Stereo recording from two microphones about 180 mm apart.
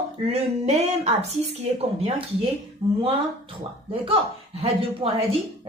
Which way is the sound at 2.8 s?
30° right (ahead or behind).